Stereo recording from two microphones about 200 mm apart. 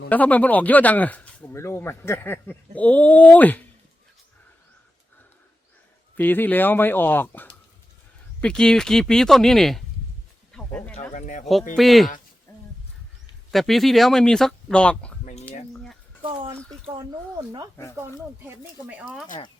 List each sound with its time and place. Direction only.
0.1 s speech: 5° left (ahead or behind)
6.1 s speech: 10° left (ahead or behind)
10.5 s wild animals: 5° left (ahead or behind)
11.1 s speech: 40° left (ahead or behind)
11.7 s speech: centre (ahead or behind)
12.5 s wild animals: 15° left (ahead or behind)
13.5 s speech: centre (ahead or behind)
15.2 s a sound: 40° left (ahead or behind)
15.7 s a sound: centre (ahead or behind)
16.2 s a sound: 25° right (ahead or behind)
17.3 s speech: 20° right (ahead or behind)
18.4 s speech: 5° right (ahead or behind)